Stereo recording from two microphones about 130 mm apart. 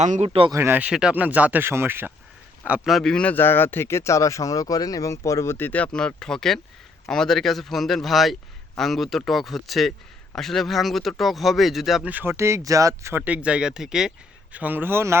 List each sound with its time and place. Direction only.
0.0 s speech: 65° right (ahead or behind)
0.5 s speech: 15° right (ahead or behind)
2.6 s a man's voice: 5° right (ahead or behind)
12.1 s speech: 20° right (ahead or behind)